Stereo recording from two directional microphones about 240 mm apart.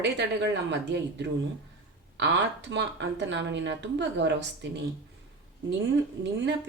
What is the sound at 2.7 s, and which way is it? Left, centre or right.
A woman's voice, right.